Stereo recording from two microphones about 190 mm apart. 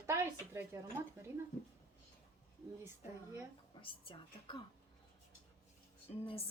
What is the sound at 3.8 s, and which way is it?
Speech, 25° left (ahead or behind).